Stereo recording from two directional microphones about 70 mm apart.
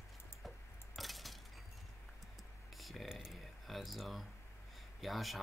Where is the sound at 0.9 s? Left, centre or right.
Centre.